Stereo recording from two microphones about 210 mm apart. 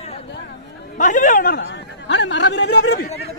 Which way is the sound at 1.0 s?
35° left (ahead or behind).